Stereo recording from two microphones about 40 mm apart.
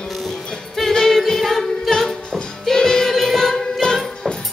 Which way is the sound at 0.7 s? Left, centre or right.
Centre.